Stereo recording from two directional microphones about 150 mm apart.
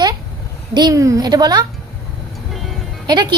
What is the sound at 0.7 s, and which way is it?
Speech, 30° right (ahead or behind).